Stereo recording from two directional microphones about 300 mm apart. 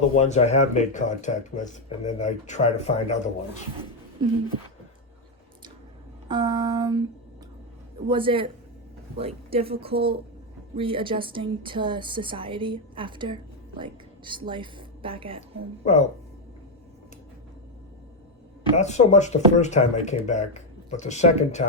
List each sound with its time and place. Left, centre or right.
0.2 s speech: left
6.2 s a woman's voice: centre
8.0 s a woman's voice: centre
15.8 s speech: left
18.8 s speech: left